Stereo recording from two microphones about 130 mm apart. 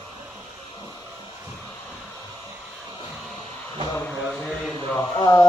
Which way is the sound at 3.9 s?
15° left (ahead or behind).